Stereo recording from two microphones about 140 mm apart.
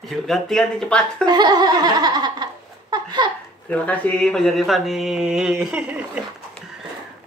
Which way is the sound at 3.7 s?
10° left (ahead or behind).